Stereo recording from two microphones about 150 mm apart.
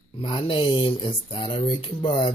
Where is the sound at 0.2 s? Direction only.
35° left (ahead or behind).